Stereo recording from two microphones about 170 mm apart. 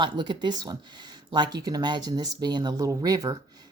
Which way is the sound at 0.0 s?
25° right (ahead or behind).